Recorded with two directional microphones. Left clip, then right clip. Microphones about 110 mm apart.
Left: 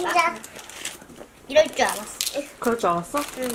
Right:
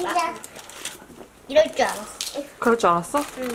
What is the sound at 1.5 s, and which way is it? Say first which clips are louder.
Speech: even; 5° left (ahead or behind).